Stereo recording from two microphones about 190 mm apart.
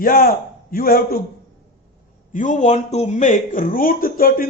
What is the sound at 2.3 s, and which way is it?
A man's voice, 40° left (ahead or behind).